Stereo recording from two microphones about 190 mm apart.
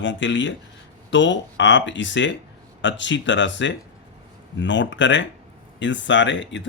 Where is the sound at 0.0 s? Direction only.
75° left (ahead or behind).